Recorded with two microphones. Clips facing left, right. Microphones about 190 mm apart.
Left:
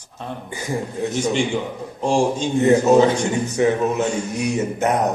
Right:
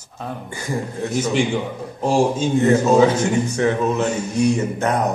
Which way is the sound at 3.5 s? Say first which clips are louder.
Left 1 dB; 15° left (ahead or behind).